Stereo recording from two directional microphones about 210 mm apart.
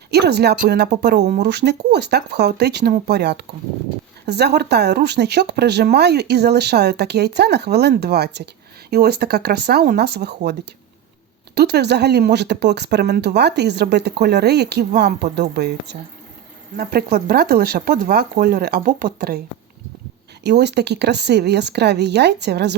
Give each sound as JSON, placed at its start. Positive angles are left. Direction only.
{"t": 0.1, "sound": "speech", "side_deg": -50}
{"t": 20.4, "sound": "speech", "side_deg": -55}